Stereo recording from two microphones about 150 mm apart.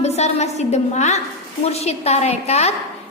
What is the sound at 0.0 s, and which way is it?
A woman's voice, 45° left (ahead or behind).